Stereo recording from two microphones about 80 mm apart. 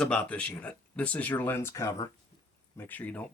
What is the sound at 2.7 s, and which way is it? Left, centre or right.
Speech, left.